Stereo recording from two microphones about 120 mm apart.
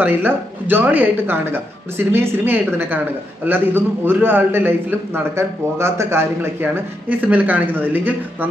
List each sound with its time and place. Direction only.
0.0 s a man's voice: 15° right (ahead or behind)